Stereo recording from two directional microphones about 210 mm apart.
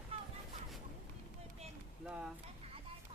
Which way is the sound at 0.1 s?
25° right (ahead or behind).